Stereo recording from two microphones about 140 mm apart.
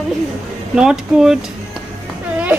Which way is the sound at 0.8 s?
5° right (ahead or behind).